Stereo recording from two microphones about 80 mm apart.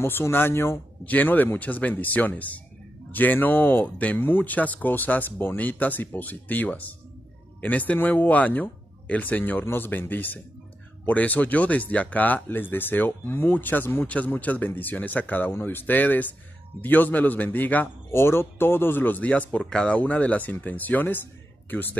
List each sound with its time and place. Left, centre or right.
0.0 s a man's voice: left